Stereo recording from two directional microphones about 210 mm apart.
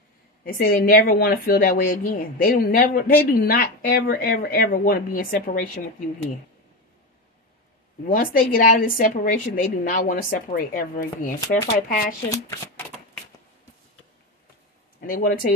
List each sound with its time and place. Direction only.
0.5 s a woman's voice: 45° left (ahead or behind)
8.1 s a woman's voice: 40° left (ahead or behind)
12.3 s speech: 15° left (ahead or behind)
15.0 s speech: 40° left (ahead or behind)